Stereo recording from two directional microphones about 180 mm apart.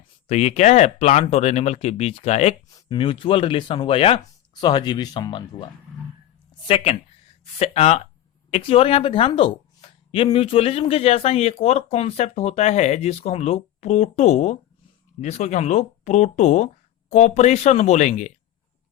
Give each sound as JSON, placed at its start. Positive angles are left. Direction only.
{"t": 0.3, "sound": "speech", "side_deg": 40}
{"t": 2.6, "sound": "speech", "side_deg": 20}
{"t": 6.7, "sound": "speech", "side_deg": 35}